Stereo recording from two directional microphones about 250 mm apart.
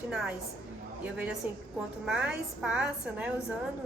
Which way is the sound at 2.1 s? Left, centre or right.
Centre.